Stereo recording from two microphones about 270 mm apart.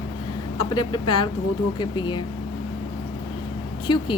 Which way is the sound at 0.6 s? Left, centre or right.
Centre.